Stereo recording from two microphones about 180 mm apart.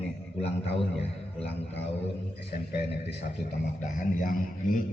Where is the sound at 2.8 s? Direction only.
65° left (ahead or behind).